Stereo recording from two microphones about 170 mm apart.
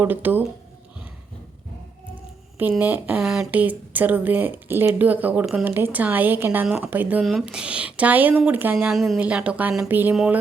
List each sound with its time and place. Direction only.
0.0 s speech: 10° right (ahead or behind)
2.6 s speech: 10° right (ahead or behind)